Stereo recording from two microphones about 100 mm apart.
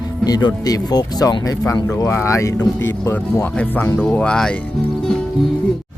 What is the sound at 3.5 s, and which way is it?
Speech, 10° left (ahead or behind).